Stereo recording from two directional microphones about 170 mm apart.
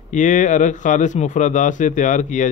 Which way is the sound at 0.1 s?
45° left (ahead or behind).